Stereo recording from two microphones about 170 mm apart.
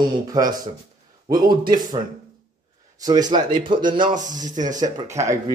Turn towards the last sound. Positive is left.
turn(degrees=-20)  # may be behind; listen again after turning